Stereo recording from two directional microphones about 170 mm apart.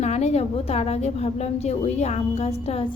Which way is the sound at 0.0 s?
40° left (ahead or behind).